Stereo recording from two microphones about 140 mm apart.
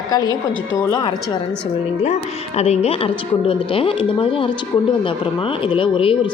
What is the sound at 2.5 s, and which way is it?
Speech, 50° left (ahead or behind).